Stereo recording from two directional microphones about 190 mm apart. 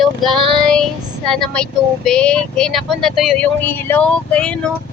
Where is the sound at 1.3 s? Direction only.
5° left (ahead or behind).